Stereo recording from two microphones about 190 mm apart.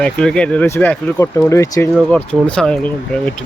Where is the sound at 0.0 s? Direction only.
5° left (ahead or behind).